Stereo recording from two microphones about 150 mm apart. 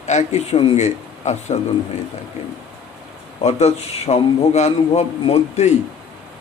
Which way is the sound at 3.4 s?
45° left (ahead or behind).